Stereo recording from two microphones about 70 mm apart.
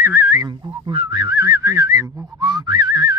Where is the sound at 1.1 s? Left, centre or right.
Right.